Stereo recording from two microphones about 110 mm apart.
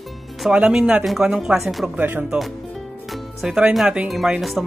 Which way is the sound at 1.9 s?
15° right (ahead or behind).